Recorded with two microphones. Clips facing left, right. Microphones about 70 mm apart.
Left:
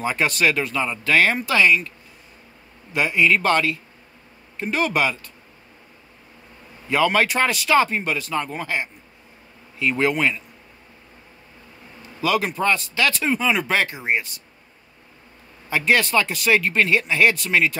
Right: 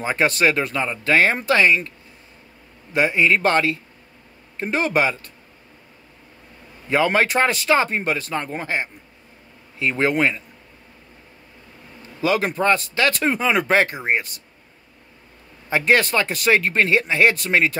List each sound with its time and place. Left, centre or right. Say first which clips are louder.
0.0 s speech: right 2 dB; right
2.9 s a man's voice: right 1 dB; right
6.9 s speech: right 1 dB; right
12.2 s speech: right 1 dB; right
15.8 s speech: right 1 dB; right